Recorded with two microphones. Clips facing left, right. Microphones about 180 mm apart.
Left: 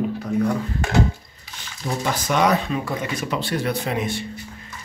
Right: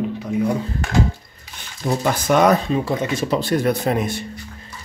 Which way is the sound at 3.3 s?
45° right (ahead or behind).